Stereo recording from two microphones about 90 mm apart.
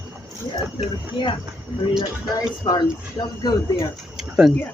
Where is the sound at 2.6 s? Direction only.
50° left (ahead or behind).